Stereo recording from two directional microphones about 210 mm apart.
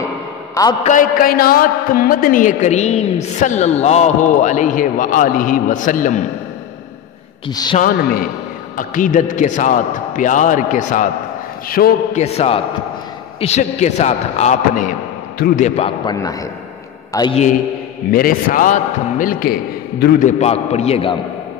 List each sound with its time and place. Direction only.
0.8 s a man's voice: 40° left (ahead or behind)
7.4 s a man's voice: 20° left (ahead or behind)
7.8 s a man's voice: 45° left (ahead or behind)
12.2 s a man's voice: 30° left (ahead or behind)
16.2 s a man's voice: 15° left (ahead or behind)
18.1 s a man's voice: 40° left (ahead or behind)